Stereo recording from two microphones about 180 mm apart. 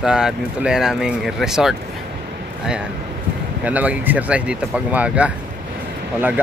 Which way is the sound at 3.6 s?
10° right (ahead or behind).